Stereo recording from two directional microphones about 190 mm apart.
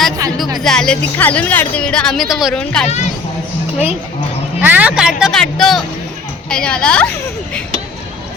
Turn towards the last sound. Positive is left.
turn(degrees=5)  # may be behind; listen again after turning